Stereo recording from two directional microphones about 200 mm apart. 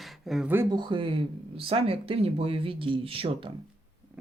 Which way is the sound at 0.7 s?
25° right (ahead or behind).